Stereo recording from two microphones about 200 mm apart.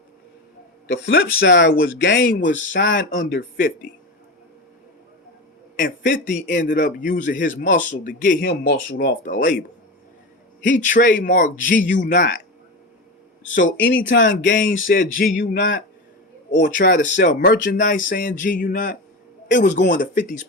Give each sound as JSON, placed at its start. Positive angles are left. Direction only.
{"t": 0.9, "sound": "a man's voice", "side_deg": 50}
{"t": 3.1, "sound": "a man's voice", "side_deg": 50}
{"t": 5.7, "sound": "a man's voice", "side_deg": 45}
{"t": 8.9, "sound": "speech", "side_deg": 65}
{"t": 9.2, "sound": "a man's voice", "side_deg": 45}
{"t": 13.4, "sound": "speech", "side_deg": 70}
{"t": 14.5, "sound": "a man's voice", "side_deg": 45}
{"t": 17.2, "sound": "a man's voice", "side_deg": 55}
{"t": 19.7, "sound": "speech", "side_deg": 60}
{"t": 20.0, "sound": "a man's voice", "side_deg": 40}